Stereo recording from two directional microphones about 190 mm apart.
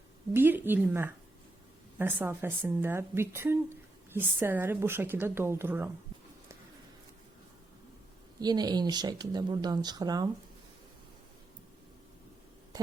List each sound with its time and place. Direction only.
0.3 s a woman's voice: 10° right (ahead or behind)
8.4 s speech: 20° right (ahead or behind)